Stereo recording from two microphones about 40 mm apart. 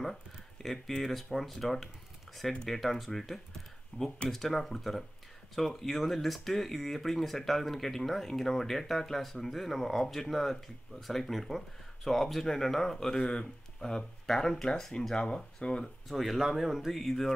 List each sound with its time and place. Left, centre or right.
0.0 s speech: centre
3.9 s speech: left
4.3 s speech: centre
15.1 s speech: left
16.1 s speech: centre